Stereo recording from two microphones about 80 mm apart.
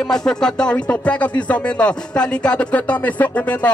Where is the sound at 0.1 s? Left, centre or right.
Centre.